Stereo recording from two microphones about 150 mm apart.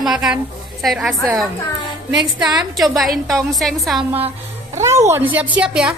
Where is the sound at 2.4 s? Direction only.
Centre (ahead or behind).